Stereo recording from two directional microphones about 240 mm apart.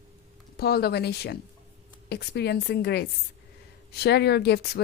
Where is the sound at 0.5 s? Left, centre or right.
Left.